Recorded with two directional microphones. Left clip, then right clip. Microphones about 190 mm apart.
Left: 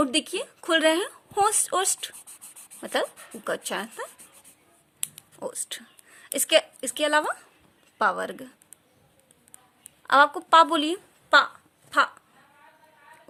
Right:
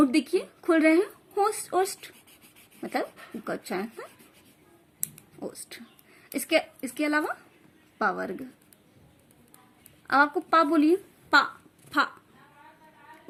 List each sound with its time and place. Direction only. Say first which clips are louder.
0.0 s a woman's voice: right 1 dB; 35° left (ahead or behind)
5.4 s a woman's voice: left 5 dB; 40° left (ahead or behind)
10.1 s speech: left 4 dB; 45° left (ahead or behind)